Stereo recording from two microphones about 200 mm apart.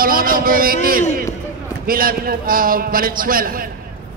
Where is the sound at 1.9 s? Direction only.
45° right (ahead or behind).